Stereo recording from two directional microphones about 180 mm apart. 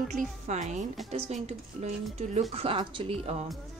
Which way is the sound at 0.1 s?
40° right (ahead or behind).